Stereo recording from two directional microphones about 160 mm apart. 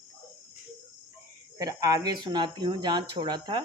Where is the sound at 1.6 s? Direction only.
20° right (ahead or behind).